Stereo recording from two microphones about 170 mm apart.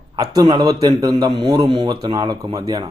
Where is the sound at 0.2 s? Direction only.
25° right (ahead or behind).